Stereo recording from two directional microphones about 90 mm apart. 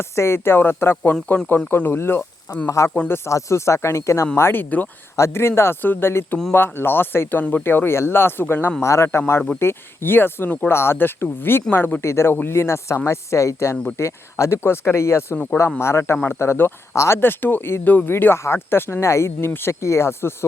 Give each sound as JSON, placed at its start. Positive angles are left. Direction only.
{"t": 0.0, "sound": "speech", "side_deg": 30}
{"t": 2.6, "sound": "speech", "side_deg": 35}